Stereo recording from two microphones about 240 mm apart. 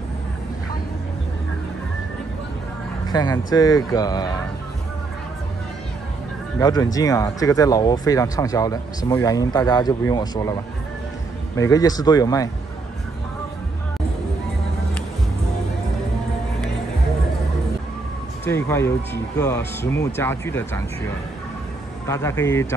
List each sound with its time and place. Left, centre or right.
3.1 s speech: centre
6.6 s speech: centre
18.4 s speech: centre
22.0 s speech: centre